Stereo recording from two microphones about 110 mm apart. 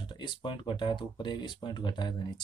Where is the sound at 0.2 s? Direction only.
45° left (ahead or behind).